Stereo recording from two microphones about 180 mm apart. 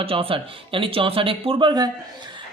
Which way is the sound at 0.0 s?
30° right (ahead or behind).